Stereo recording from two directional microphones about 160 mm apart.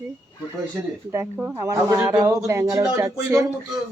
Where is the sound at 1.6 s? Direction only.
20° right (ahead or behind).